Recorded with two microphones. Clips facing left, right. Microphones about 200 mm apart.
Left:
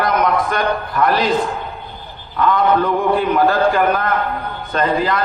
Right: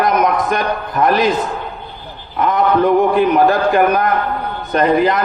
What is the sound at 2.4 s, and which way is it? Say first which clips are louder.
A man's voice: right 1 dB; 20° right (ahead or behind).